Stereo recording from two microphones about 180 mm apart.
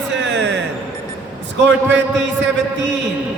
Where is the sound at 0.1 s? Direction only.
80° right.